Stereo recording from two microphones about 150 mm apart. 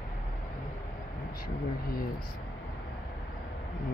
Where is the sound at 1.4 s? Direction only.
80° left.